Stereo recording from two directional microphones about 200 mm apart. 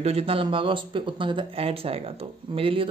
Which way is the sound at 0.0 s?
30° right (ahead or behind).